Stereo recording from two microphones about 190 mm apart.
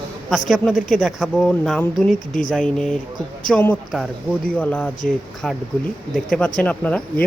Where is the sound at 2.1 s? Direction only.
45° left (ahead or behind).